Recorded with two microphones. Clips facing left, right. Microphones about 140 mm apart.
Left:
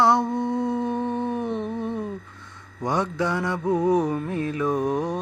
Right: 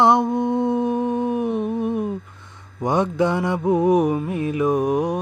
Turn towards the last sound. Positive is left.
turn(degrees=-15)  # may be behind; listen again after turning